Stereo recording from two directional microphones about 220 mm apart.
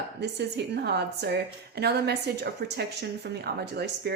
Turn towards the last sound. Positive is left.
turn(degrees=-50)  # may be behind; listen again after turning